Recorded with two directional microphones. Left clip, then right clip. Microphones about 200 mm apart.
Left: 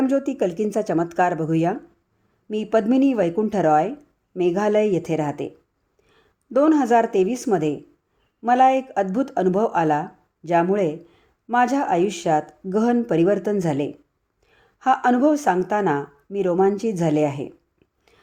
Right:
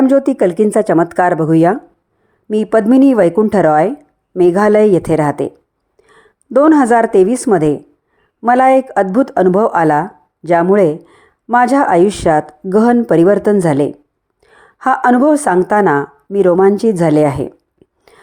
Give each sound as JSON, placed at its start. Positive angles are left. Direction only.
{"t": 0.0, "sound": "a woman's voice", "side_deg": -20}